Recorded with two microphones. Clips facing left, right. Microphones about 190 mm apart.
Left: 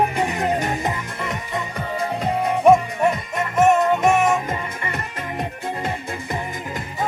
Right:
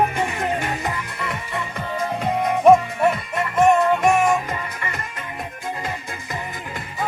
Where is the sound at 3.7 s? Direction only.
20° left (ahead or behind).